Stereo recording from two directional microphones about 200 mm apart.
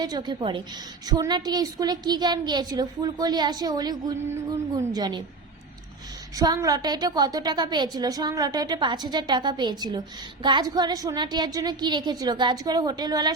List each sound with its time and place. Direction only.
0.0 s a woman's voice: 20° right (ahead or behind)
6.3 s a woman's voice: 20° right (ahead or behind)